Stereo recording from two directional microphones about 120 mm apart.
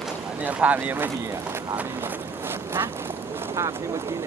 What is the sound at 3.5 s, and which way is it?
Speech, 25° right (ahead or behind).